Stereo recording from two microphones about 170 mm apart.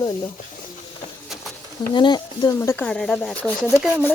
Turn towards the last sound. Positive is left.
turn(degrees=-5)  # may be behind; listen again after turning